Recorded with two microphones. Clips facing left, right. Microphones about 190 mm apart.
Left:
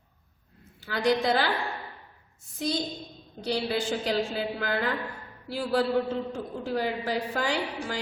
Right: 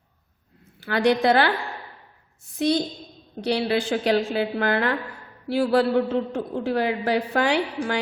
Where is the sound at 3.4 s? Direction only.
70° right (ahead or behind).